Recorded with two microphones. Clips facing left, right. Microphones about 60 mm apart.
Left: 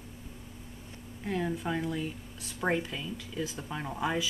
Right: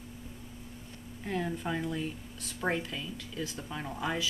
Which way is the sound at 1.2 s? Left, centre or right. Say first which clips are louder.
Left 2 dB; centre.